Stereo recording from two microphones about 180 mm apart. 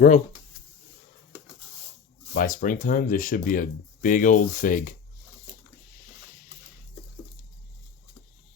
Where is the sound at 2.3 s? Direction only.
50° left (ahead or behind).